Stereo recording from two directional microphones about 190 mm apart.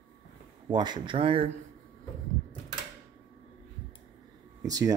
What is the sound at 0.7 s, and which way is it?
Speech, 25° right (ahead or behind).